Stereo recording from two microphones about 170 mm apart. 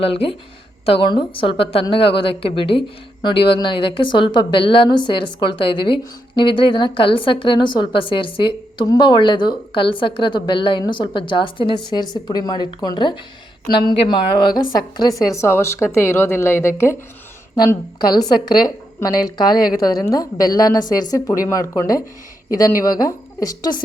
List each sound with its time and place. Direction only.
0.0 s a woman's voice: 35° left (ahead or behind)